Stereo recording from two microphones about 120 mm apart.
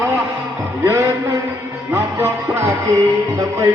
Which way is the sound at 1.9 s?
20° right (ahead or behind).